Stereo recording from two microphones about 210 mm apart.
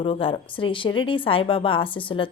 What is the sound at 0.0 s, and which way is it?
A woman's voice, 25° left (ahead or behind).